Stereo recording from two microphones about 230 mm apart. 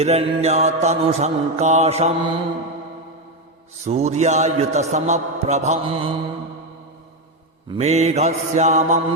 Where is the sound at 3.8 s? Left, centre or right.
Right.